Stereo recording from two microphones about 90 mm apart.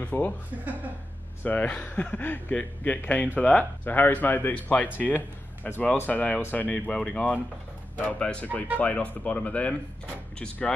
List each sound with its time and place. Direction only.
0.0 s speech: 20° left (ahead or behind)
1.4 s speech: 15° left (ahead or behind)